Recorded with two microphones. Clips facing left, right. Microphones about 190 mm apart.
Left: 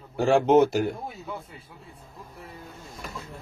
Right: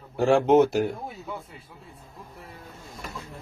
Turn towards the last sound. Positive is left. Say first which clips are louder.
# even
turn(degrees=0)  # may be behind; listen again after turning